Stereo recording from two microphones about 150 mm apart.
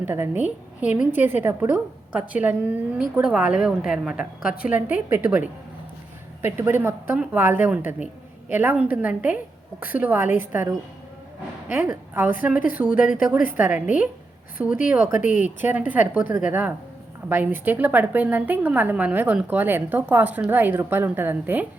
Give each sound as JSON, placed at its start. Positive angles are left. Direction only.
{"t": 0.0, "sound": "a woman's voice", "side_deg": -15}
{"t": 6.4, "sound": "a woman's voice", "side_deg": -15}
{"t": 15.1, "sound": "speech", "side_deg": 55}
{"t": 15.6, "sound": "a woman's voice", "side_deg": -10}